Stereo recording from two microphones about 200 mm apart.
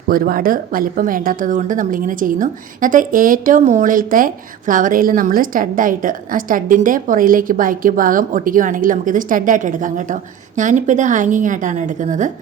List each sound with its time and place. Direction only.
0.1 s a woman's voice: 45° right (ahead or behind)